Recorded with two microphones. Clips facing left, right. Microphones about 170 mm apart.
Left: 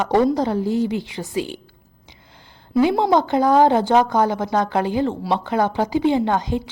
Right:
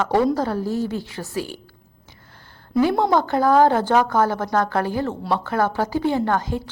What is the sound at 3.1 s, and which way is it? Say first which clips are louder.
A woman's voice: left 1 dB; 20° left (ahead or behind).